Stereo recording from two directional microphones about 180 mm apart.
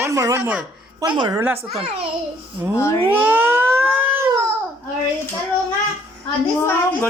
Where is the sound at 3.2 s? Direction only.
10° right (ahead or behind).